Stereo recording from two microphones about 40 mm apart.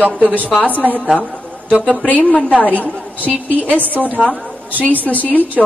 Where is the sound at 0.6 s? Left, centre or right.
Right.